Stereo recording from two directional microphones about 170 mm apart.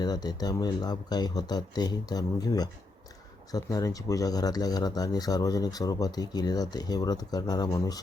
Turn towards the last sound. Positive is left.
turn(degrees=20)  # may be behind; listen again after turning